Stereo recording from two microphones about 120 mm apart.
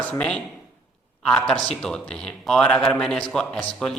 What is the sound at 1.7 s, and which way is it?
A man's voice, 5° left (ahead or behind).